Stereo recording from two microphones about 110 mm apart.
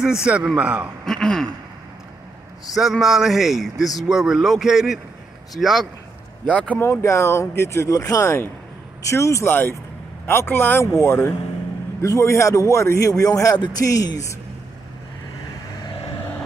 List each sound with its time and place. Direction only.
0.0 s a man's voice: 5° right (ahead or behind)
1.0 s speech: 5° left (ahead or behind)
2.7 s speech: 5° right (ahead or behind)
6.5 s speech: 10° left (ahead or behind)
6.8 s speech: 25° left (ahead or behind)